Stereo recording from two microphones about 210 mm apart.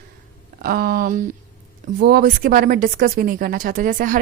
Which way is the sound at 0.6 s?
45° right (ahead or behind).